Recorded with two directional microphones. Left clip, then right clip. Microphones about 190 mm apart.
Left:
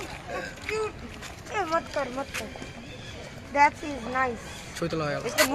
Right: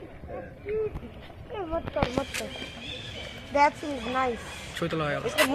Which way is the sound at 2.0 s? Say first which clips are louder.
Right 1 dB; 30° right (ahead or behind).